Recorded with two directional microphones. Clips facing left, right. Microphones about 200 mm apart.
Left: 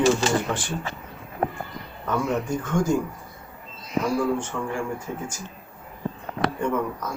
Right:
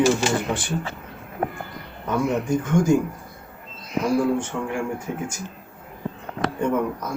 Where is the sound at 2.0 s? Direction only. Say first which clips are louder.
Right 3 dB; 15° right (ahead or behind).